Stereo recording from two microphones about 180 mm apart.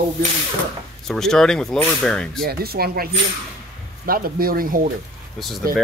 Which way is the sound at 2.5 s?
60° right (ahead or behind).